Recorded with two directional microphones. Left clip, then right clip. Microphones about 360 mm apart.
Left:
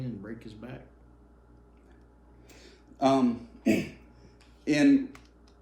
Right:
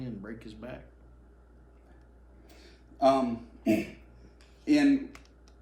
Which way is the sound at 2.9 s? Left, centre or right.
Left.